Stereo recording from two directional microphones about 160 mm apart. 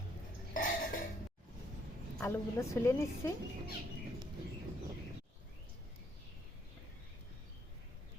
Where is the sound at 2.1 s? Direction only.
15° left (ahead or behind).